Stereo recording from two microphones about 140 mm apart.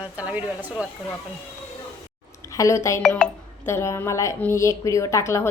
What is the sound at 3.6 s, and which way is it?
Speech, 20° left (ahead or behind).